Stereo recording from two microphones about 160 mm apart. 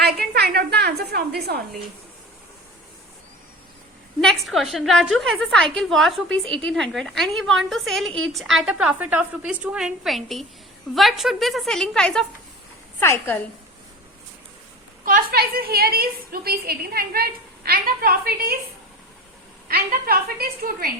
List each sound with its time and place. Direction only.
0.0 s a sound: 90° right
4.2 s a woman's voice: centre (ahead or behind)
15.0 s a woman's voice: 65° right (ahead or behind)
19.6 s a woman's voice: 65° right (ahead or behind)